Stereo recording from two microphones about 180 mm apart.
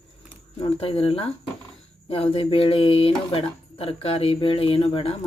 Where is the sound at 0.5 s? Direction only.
30° left (ahead or behind).